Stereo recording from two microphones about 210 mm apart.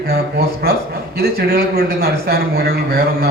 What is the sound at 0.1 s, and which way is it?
A man's voice, 50° right (ahead or behind).